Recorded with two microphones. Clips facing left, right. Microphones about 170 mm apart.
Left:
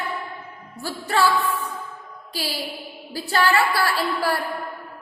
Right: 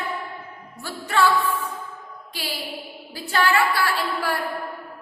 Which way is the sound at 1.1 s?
35° left (ahead or behind).